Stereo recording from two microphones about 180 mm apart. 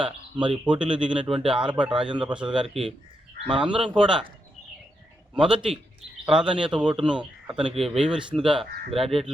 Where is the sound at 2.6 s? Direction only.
30° right (ahead or behind).